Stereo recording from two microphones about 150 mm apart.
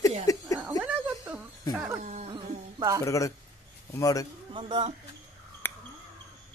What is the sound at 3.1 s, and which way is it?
Speech, 20° left (ahead or behind).